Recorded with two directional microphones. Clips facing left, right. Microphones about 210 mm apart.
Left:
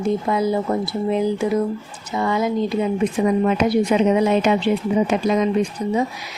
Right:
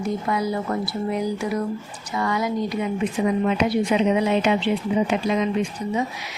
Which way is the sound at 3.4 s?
45° left (ahead or behind).